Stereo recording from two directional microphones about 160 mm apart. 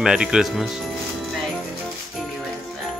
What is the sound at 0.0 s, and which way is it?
Speech, 5° right (ahead or behind).